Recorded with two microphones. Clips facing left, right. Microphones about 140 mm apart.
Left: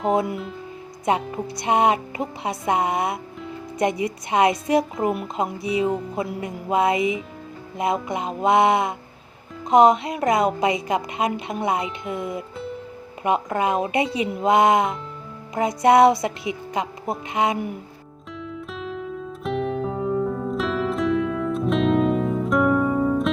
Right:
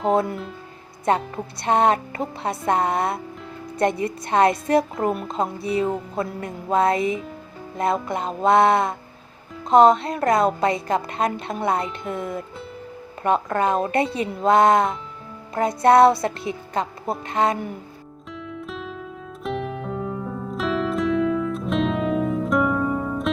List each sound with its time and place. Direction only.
0.1 s speech: 15° left (ahead or behind)
13.2 s speech: 10° left (ahead or behind)
18.3 s music: centre (ahead or behind)